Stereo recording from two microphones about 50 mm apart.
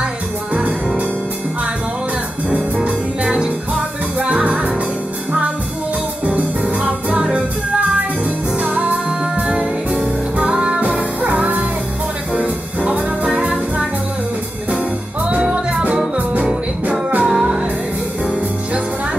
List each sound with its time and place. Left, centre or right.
0.5 s music: centre
2.5 s music: right
6.2 s music: right
8.6 s music: right; by 10.8 s centre
11.2 s music: right
15.2 s music: centre
17.2 s music: centre